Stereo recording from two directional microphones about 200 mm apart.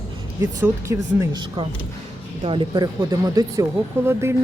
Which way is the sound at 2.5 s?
25° right (ahead or behind).